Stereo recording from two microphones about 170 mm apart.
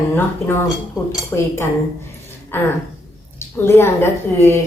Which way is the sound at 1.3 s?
10° left (ahead or behind).